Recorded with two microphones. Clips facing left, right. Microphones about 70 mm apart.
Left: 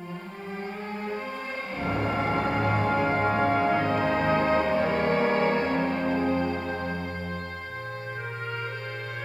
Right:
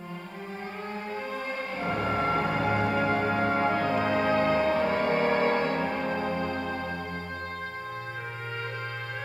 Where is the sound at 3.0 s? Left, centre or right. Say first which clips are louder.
Left 2 dB; left.